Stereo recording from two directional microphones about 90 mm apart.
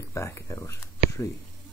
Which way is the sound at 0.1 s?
35° left (ahead or behind).